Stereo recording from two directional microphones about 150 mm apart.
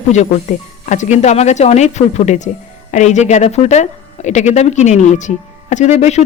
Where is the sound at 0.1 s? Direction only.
50° left (ahead or behind).